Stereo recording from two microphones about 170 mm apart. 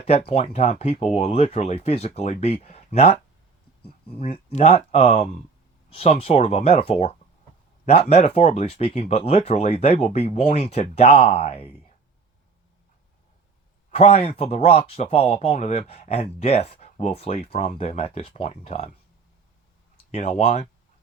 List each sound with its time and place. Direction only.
0.1 s speech: 35° left (ahead or behind)
13.9 s speech: 35° left (ahead or behind)
20.1 s speech: 40° left (ahead or behind)